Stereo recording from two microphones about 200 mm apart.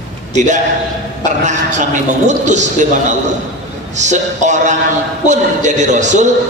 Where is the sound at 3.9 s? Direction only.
35° right (ahead or behind).